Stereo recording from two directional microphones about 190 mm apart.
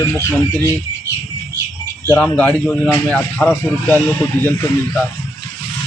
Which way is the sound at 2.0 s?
5° left (ahead or behind).